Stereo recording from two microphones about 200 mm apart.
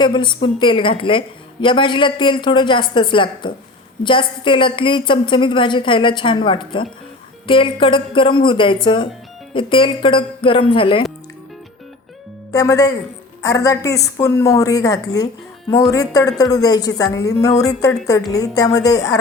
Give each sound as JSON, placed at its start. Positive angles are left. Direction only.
{"t": 0.0, "sound": "a woman's voice", "side_deg": 25}
{"t": 12.5, "sound": "a woman's voice", "side_deg": 15}